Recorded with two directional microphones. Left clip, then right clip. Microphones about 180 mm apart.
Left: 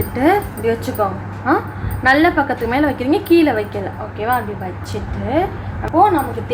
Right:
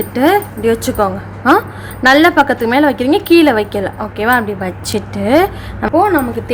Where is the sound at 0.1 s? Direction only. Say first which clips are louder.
Right 3 dB; 35° right (ahead or behind).